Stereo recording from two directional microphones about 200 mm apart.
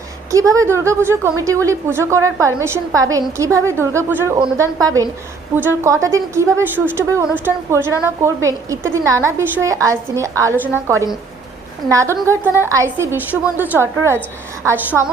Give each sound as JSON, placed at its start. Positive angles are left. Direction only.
{"t": 0.3, "sound": "a woman's voice", "side_deg": -15}